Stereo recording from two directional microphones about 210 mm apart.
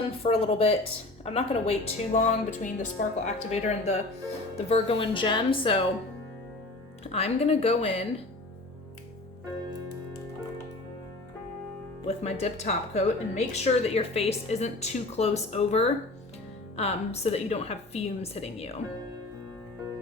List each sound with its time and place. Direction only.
0.2 s a woman's voice: 30° left (ahead or behind)
7.0 s a woman's voice: 30° left (ahead or behind)
12.0 s a woman's voice: 30° left (ahead or behind)